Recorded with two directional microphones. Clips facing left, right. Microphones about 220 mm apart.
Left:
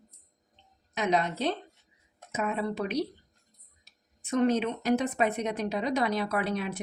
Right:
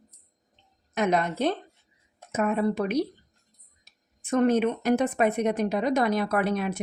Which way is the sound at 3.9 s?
50° right (ahead or behind).